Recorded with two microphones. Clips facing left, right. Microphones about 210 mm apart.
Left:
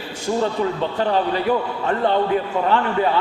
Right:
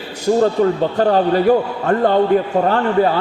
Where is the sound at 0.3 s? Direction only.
45° right (ahead or behind).